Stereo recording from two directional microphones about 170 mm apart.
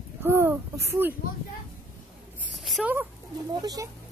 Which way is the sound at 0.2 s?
15° right (ahead or behind).